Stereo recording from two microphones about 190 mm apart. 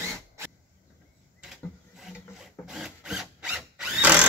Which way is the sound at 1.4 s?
5° right (ahead or behind).